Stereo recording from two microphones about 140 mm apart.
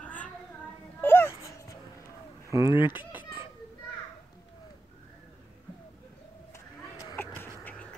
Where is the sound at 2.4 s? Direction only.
20° right (ahead or behind).